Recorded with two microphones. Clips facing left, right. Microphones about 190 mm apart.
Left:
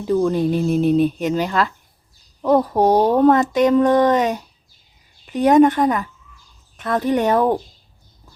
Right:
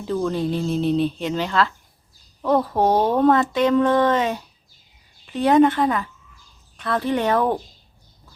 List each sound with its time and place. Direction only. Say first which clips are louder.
0.1 s speech: left 5 dB; 15° left (ahead or behind)
5.5 s speech: left 3 dB; 15° left (ahead or behind)